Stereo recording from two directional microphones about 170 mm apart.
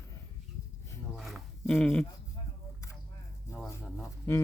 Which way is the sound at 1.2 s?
Centre (ahead or behind).